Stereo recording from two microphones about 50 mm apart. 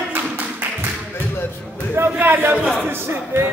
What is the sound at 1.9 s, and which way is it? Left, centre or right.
Speech, right.